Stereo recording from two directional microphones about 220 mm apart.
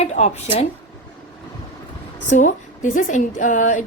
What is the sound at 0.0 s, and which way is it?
Speech, 30° left (ahead or behind).